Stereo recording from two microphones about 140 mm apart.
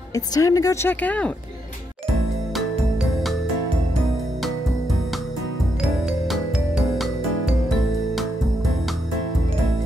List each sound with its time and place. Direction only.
0.1 s a woman's voice: 25° left (ahead or behind)
3.0 s music: centre (ahead or behind)
5.8 s music: centre (ahead or behind)